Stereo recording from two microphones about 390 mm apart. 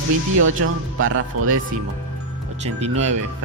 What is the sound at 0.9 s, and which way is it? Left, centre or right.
Speech, right.